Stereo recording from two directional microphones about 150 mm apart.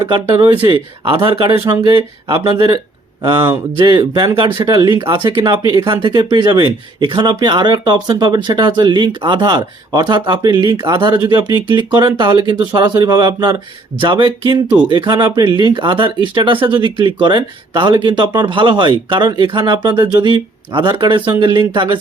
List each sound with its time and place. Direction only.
0.0 s speech: 35° right (ahead or behind)